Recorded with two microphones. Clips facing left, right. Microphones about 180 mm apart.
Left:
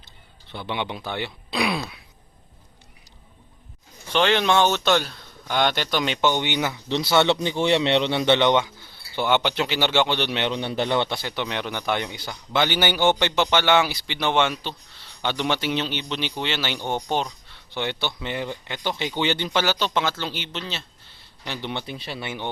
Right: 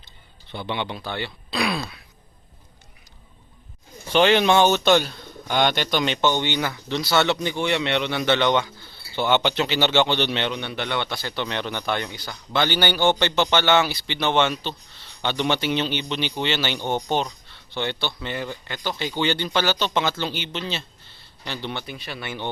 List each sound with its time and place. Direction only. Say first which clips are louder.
0.5 s a man's voice: right 1 dB; centre (ahead or behind)
0.8 s speech: even; 15° left (ahead or behind)
4.1 s speech: right 3 dB; 5° right (ahead or behind); by 10.5 s 10° left (ahead or behind)
10.5 s a man's voice: left 4 dB; 35° left (ahead or behind)
11.2 s a man's voice: even; 15° left (ahead or behind); by 20.8 s centre (ahead or behind)
21.4 s speech: even; 15° left (ahead or behind)
21.8 s speech: left 1 dB; 30° left (ahead or behind)